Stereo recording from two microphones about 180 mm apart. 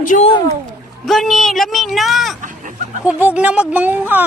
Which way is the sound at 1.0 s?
Centre (ahead or behind).